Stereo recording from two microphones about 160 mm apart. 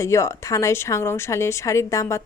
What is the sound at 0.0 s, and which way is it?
A woman's voice, 20° left (ahead or behind).